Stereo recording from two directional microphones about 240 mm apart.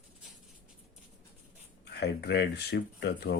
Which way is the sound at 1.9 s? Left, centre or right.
Left.